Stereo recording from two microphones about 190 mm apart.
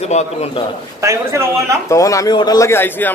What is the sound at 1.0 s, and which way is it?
Speech, 15° right (ahead or behind).